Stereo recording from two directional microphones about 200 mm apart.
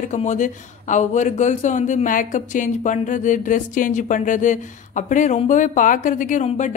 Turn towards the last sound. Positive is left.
turn(degrees=35)  # may be behind; listen again after turning